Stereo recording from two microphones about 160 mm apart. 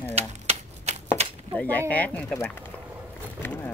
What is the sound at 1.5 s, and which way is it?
Speech, 10° left (ahead or behind).